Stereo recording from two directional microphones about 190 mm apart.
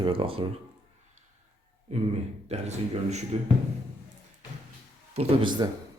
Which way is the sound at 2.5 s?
35° right (ahead or behind).